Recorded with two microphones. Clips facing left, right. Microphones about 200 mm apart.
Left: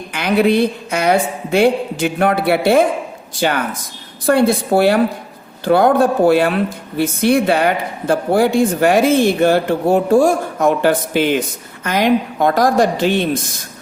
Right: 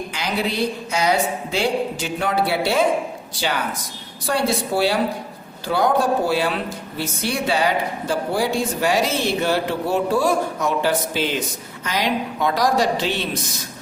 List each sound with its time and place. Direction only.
0.1 s a woman's voice: 60° left (ahead or behind)
4.3 s a woman's voice: 55° left (ahead or behind)